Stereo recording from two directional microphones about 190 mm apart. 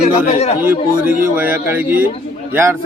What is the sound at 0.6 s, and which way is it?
Speech, 10° right (ahead or behind).